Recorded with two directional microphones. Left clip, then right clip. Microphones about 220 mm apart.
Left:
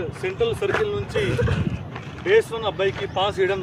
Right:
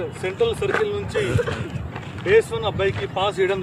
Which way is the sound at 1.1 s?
20° right (ahead or behind).